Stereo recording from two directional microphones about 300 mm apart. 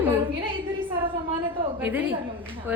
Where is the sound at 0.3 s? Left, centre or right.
Centre.